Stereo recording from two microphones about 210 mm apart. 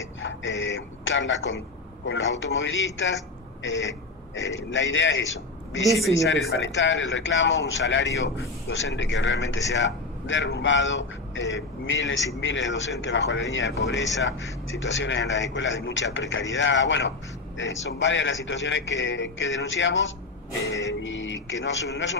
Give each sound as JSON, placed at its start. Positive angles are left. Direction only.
{"t": 0.2, "sound": "a man's voice", "side_deg": 65}
{"t": 4.4, "sound": "a man's voice", "side_deg": 65}
{"t": 5.8, "sound": "a man's voice", "side_deg": 0}
{"t": 6.1, "sound": "a man's voice", "side_deg": 65}